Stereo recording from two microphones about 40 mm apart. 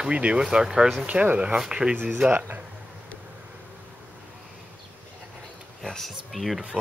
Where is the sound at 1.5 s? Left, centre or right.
Centre.